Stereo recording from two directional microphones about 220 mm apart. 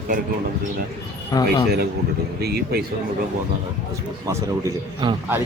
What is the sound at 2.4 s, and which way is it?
Speech, 45° right (ahead or behind).